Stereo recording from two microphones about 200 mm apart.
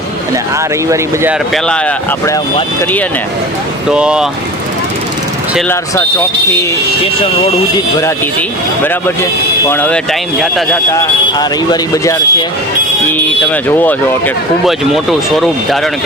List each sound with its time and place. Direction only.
0.5 s speech: 15° right (ahead or behind)
1.5 s speech: 5° left (ahead or behind)
3.9 s speech: 5° right (ahead or behind)
8.0 s speech: 10° left (ahead or behind)
10.9 s speech: 20° left (ahead or behind); by 15.9 s centre (ahead or behind)